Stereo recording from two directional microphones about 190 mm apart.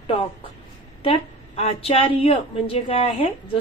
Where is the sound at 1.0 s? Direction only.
30° left (ahead or behind).